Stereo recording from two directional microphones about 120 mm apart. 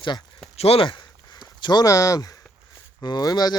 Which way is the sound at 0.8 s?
40° left (ahead or behind).